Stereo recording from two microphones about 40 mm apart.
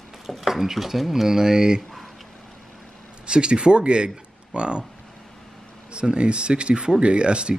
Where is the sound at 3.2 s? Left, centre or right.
Right.